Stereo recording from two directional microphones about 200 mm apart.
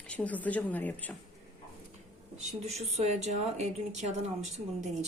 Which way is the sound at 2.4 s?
35° right (ahead or behind).